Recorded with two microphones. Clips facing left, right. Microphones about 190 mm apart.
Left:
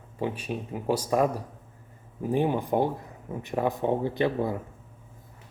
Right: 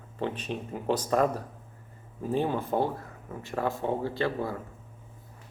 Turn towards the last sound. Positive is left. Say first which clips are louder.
# left 4 dB
turn(degrees=20)  # may be behind; listen again after turning